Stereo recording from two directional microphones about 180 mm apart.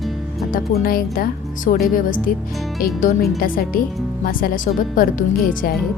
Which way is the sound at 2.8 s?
45° left (ahead or behind).